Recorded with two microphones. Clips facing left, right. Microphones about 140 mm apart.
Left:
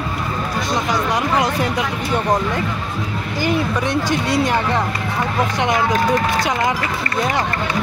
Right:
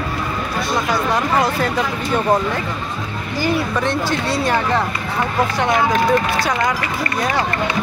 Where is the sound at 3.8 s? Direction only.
15° left (ahead or behind).